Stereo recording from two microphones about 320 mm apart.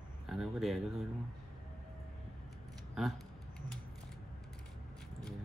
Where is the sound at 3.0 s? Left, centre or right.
Centre.